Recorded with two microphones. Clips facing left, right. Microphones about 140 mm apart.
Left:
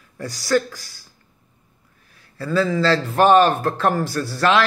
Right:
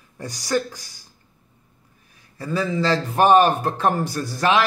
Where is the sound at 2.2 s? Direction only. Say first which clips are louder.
Left 4 dB; 15° right (ahead or behind).